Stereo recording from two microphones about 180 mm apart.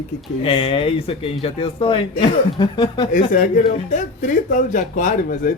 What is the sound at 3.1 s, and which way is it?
Speech, 45° left (ahead or behind).